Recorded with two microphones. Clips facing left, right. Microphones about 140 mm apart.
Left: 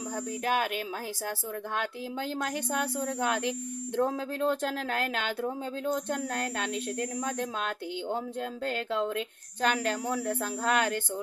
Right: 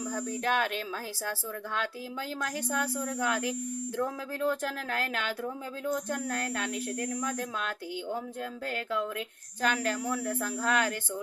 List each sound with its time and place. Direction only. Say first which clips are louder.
0.4 s a woman's voice: left 1 dB; 10° left (ahead or behind)
1.8 s a woman's voice: left 1 dB; 20° left (ahead or behind)